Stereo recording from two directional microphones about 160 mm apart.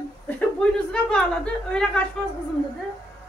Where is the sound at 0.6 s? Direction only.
5° left (ahead or behind).